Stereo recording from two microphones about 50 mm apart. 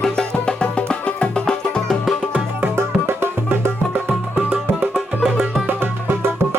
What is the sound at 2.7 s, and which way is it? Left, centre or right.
Music, right.